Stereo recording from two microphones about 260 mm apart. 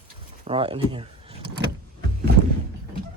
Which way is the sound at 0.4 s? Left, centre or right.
Right.